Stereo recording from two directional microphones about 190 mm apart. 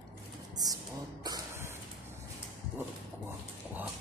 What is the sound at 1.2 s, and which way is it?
Spray, 20° right (ahead or behind).